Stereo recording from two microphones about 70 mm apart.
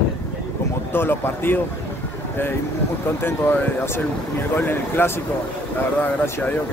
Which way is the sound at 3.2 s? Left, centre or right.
Left.